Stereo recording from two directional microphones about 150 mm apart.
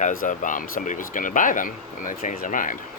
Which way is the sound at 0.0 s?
65° left (ahead or behind).